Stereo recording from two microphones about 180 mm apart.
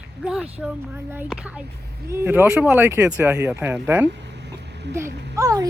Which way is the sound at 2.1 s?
10° right (ahead or behind).